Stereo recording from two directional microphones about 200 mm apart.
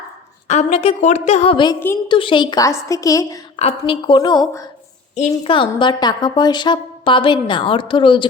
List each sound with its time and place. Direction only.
0.4 s a woman's voice: 35° left (ahead or behind); by 3.3 s 15° left (ahead or behind)
3.6 s a woman's voice: 30° left (ahead or behind)
5.1 s a woman's voice: 30° left (ahead or behind)